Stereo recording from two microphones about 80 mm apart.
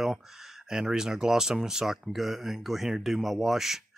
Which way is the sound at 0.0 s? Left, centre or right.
Centre.